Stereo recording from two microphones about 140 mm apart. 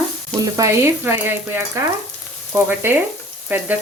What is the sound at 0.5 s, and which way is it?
Frying, 20° right (ahead or behind).